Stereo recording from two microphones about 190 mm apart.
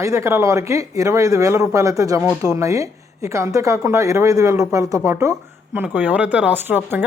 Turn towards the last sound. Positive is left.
turn(degrees=-10)  # may be behind; listen again after turning